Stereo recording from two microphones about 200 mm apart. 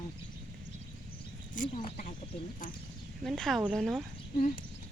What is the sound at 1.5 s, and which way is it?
Speech, 40° left (ahead or behind).